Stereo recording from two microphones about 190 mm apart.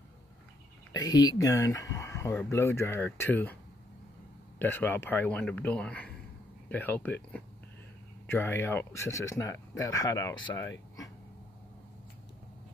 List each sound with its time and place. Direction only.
0.9 s speech: 20° left (ahead or behind)
4.6 s speech: 10° left (ahead or behind)
8.3 s speech: 10° left (ahead or behind)